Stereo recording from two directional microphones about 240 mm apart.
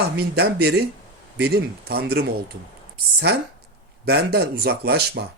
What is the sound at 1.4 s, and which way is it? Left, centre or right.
Speech, right.